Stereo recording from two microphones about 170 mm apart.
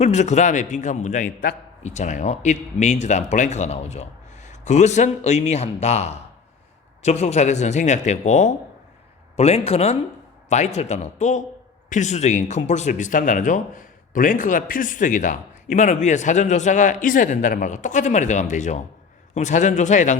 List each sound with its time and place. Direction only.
0.0 s a man's voice: 40° left (ahead or behind)